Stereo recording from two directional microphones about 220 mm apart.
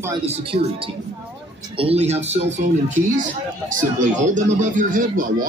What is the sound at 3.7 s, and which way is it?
Speech, 35° right (ahead or behind).